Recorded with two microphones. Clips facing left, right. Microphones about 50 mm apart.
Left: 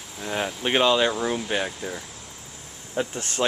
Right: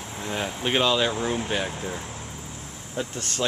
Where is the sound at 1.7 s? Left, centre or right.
Centre.